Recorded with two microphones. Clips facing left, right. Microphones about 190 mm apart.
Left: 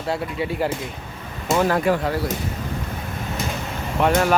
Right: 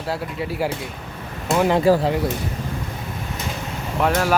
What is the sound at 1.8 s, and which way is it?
Speech, 30° right (ahead or behind).